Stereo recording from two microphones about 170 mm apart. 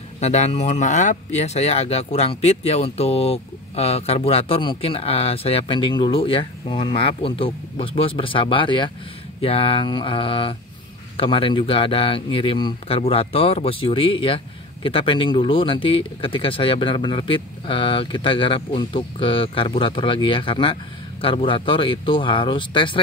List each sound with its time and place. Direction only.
0.2 s speech: 40° left (ahead or behind)